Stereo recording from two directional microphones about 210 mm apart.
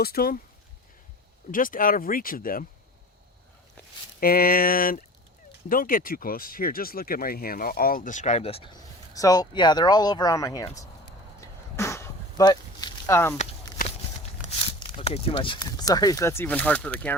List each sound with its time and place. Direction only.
0.0 s speech: 45° left (ahead or behind)
1.5 s speech: 40° left (ahead or behind)
4.2 s speech: 45° left (ahead or behind); by 10.7 s 15° left (ahead or behind)
11.3 s a sound: 15° left (ahead or behind)
14.4 s speech: 25° left (ahead or behind); by 17.2 s 5° left (ahead or behind)